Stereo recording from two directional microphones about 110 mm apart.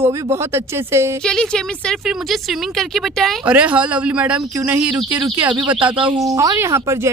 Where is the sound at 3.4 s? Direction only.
10° right (ahead or behind).